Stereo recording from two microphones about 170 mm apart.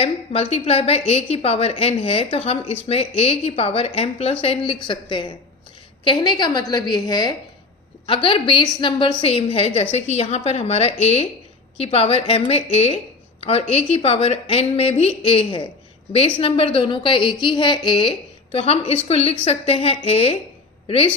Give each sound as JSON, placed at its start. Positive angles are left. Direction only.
{"t": 0.0, "sound": "a woman's voice", "side_deg": 35}